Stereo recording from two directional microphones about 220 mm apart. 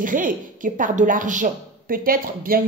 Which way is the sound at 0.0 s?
35° right (ahead or behind).